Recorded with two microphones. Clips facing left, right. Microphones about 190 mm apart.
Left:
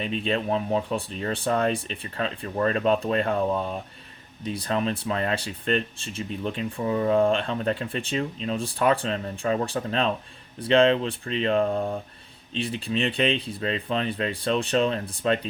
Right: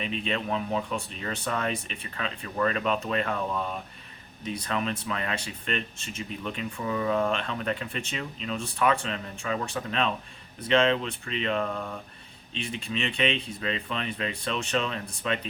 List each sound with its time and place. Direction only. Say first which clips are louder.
0.0 s speech: left 4 dB; 35° left (ahead or behind)